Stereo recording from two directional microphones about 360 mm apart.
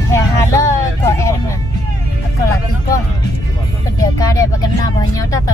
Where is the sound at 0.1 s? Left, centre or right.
Centre.